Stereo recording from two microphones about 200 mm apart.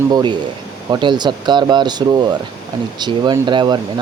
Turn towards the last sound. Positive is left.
turn(degrees=-20)  # may be behind; listen again after turning